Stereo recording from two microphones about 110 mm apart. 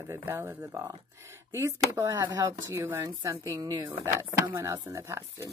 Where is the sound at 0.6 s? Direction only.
35° right (ahead or behind).